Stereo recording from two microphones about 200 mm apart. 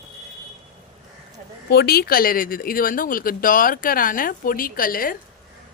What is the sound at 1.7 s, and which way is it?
Speech, 55° left (ahead or behind).